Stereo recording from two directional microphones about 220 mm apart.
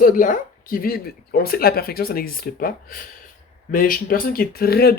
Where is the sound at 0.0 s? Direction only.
35° left (ahead or behind).